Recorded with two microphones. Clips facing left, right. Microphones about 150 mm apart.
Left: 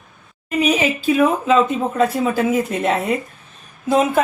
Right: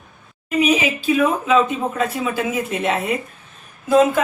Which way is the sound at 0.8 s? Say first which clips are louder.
Left 2 dB; 40° left (ahead or behind).